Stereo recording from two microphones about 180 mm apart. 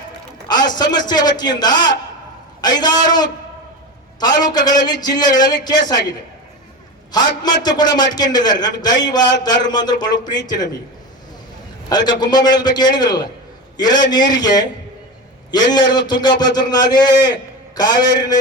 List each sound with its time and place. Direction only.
0.4 s a man's voice: 25° left (ahead or behind)
11.9 s a man's voice: 25° left (ahead or behind)